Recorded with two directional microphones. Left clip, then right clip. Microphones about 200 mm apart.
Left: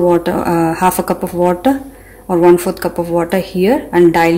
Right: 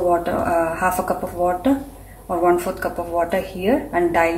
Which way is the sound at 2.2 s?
50° left (ahead or behind).